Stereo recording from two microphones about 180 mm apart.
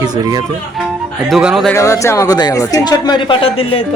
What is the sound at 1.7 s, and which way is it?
Speech, 15° left (ahead or behind).